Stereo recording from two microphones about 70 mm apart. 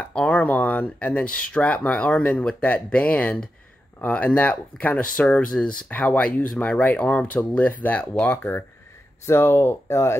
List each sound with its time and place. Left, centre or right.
0.0 s speech: centre
8.3 s speech: left
9.2 s speech: left